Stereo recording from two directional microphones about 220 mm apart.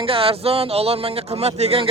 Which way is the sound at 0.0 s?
25° right (ahead or behind).